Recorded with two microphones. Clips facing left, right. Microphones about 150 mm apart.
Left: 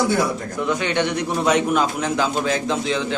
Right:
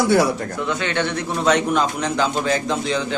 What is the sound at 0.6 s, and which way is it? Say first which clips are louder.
A man's voice: left 2 dB; 15° left (ahead or behind).